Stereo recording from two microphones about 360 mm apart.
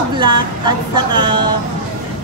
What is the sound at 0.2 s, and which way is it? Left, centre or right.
Speech, centre.